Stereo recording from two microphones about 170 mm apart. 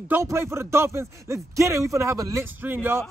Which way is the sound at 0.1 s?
15° right (ahead or behind).